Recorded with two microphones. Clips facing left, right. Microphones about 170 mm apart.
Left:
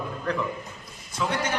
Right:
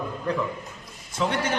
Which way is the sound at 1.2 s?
25° right (ahead or behind).